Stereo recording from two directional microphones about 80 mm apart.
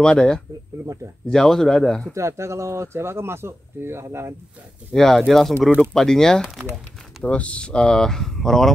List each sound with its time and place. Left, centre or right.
0.0 s speech: centre
2.1 s speech: right
4.9 s speech: centre